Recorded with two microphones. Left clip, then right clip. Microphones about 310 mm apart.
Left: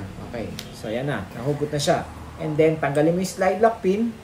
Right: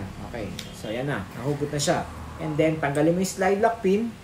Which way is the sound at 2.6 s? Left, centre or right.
Centre.